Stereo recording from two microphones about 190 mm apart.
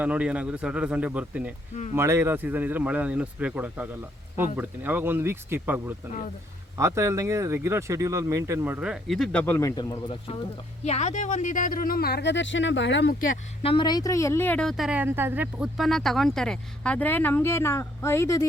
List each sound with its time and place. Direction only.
0.0 s speech: 5° right (ahead or behind); by 10.0 s 15° left (ahead or behind)
10.8 s speech: 35° left (ahead or behind); by 13.1 s 70° left (ahead or behind)
13.6 s a woman's voice: 25° left (ahead or behind)